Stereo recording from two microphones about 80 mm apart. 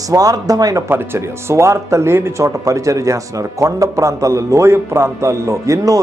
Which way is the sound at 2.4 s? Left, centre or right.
Right.